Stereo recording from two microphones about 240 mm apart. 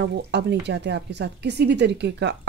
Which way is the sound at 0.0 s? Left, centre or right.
Right.